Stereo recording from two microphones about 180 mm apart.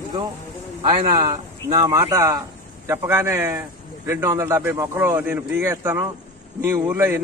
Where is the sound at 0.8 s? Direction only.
20° right (ahead or behind).